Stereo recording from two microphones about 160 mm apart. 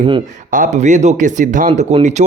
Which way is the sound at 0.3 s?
50° right (ahead or behind).